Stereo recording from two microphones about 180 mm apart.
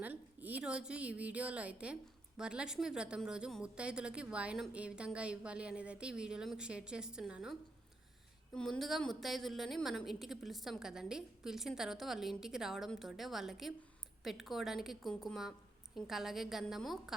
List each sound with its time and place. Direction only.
0.0 s a woman's voice: 10° right (ahead or behind)
8.5 s a woman's voice: 5° left (ahead or behind)